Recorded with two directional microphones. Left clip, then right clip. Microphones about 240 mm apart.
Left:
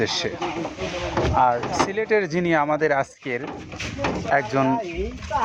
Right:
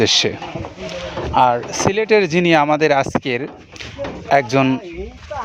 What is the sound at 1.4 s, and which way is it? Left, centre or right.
Speech, right.